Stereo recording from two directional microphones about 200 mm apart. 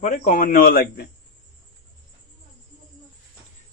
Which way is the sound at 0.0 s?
40° left (ahead or behind).